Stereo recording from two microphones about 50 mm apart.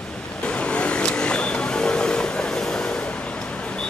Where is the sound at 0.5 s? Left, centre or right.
Left.